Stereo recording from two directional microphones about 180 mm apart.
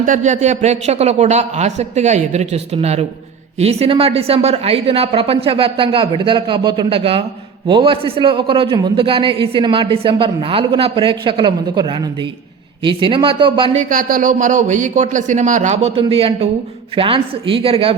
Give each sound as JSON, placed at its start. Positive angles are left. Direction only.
{"t": 0.0, "sound": "a woman's voice", "side_deg": -45}
{"t": 13.7, "sound": "a man's voice", "side_deg": -50}